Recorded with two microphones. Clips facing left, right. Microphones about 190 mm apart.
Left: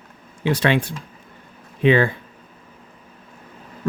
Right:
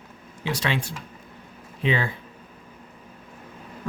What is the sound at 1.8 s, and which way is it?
Speech, 60° left (ahead or behind).